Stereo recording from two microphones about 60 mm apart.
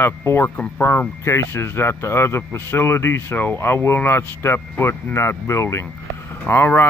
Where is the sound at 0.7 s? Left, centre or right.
Left.